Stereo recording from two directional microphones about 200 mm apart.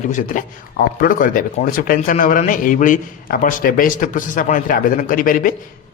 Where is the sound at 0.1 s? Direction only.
40° left (ahead or behind).